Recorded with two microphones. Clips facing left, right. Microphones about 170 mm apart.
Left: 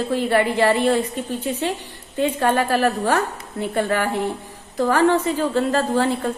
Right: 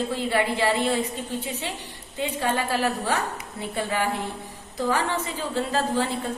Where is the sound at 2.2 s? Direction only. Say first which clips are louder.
Left 7 dB; 55° left (ahead or behind).